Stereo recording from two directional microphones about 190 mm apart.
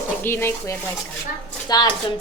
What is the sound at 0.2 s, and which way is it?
Speech, 10° left (ahead or behind).